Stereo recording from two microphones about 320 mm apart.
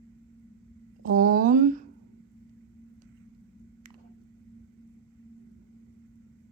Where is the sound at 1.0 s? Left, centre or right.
Right.